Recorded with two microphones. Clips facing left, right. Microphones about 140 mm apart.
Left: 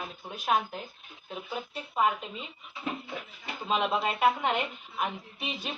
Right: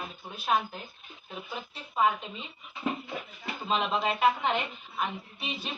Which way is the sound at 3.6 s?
5° left (ahead or behind).